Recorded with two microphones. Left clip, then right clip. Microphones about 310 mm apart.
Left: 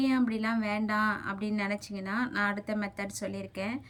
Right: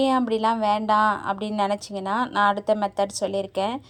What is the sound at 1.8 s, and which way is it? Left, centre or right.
Speech, centre.